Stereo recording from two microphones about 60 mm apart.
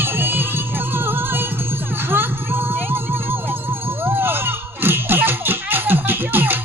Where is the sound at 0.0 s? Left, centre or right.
Right.